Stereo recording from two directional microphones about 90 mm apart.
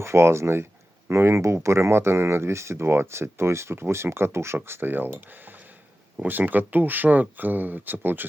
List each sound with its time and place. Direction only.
0.0 s speech: 30° right (ahead or behind)